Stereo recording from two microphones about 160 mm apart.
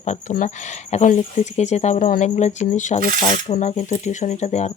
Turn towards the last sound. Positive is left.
turn(degrees=45)  # may be behind; listen again after turning